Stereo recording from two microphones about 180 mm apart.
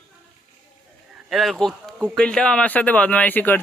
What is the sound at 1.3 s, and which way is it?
Speech, centre (ahead or behind).